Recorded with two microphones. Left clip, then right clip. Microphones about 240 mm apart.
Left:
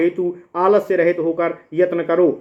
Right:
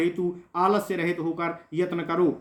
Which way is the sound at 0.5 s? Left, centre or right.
Right.